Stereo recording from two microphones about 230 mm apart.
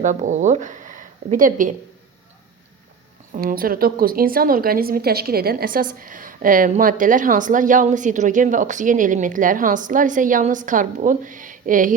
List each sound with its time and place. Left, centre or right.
0.0 s speech: right
3.3 s a woman's voice: right